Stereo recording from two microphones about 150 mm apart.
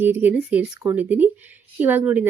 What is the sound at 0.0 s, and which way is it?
A woman's voice, 15° right (ahead or behind).